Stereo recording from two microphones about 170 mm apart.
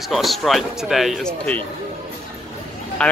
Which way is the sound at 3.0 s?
5° left (ahead or behind).